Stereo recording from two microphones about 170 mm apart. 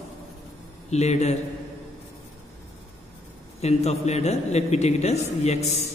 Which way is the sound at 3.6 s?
40° left (ahead or behind).